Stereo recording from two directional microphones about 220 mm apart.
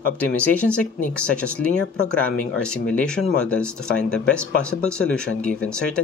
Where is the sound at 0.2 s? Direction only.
5° left (ahead or behind).